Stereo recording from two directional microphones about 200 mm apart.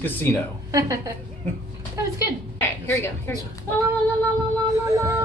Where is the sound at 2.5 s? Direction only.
10° left (ahead or behind).